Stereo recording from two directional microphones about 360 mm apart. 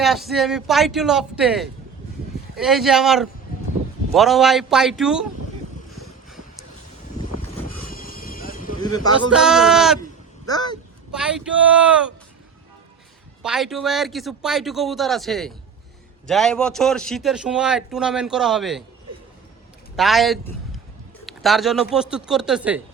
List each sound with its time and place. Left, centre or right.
0.0 s a man's voice: centre
5.9 s boat: centre
7.4 s vehicle: left
9.3 s a man's voice: centre
10.4 s a sound: centre
11.1 s a man's voice: centre
13.4 s a man's voice: centre
20.0 s a man's voice: centre